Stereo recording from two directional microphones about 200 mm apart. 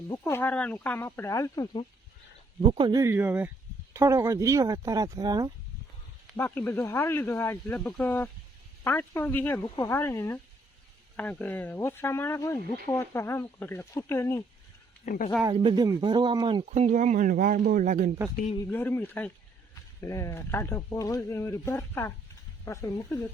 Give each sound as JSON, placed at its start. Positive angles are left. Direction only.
{"t": 0.1, "sound": "speech", "side_deg": 15}
{"t": 2.6, "sound": "speech", "side_deg": -25}
{"t": 6.3, "sound": "speech", "side_deg": 10}
{"t": 15.0, "sound": "speech", "side_deg": 40}
{"t": 15.4, "sound": "speech", "side_deg": -25}
{"t": 18.5, "sound": "speech", "side_deg": 15}